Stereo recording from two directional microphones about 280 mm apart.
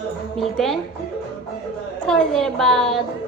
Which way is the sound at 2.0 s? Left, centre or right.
Centre.